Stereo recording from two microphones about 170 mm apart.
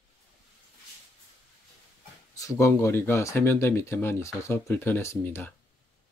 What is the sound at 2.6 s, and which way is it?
Speech, 15° left (ahead or behind).